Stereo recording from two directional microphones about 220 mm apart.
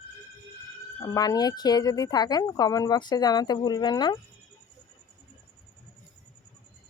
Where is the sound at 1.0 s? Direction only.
15° left (ahead or behind).